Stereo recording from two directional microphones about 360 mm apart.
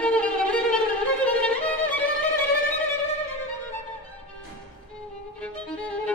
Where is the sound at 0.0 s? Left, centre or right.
Centre.